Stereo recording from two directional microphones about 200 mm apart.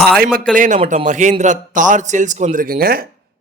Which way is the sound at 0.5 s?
40° right (ahead or behind).